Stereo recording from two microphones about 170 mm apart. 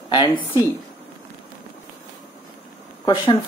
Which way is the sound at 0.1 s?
25° left (ahead or behind).